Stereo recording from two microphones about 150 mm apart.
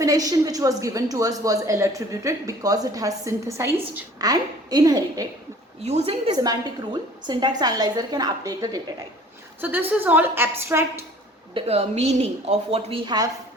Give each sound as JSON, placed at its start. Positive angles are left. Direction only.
{"t": 0.0, "sound": "a woman's voice", "side_deg": -25}
{"t": 5.8, "sound": "a woman's voice", "side_deg": -45}
{"t": 6.3, "sound": "a woman's voice", "side_deg": -25}
{"t": 9.6, "sound": "a woman's voice", "side_deg": -10}
{"t": 11.5, "sound": "a woman's voice", "side_deg": -45}
{"t": 13.1, "sound": "a woman's voice", "side_deg": -25}